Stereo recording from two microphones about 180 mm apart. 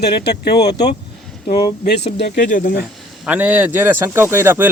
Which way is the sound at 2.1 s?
65° left (ahead or behind).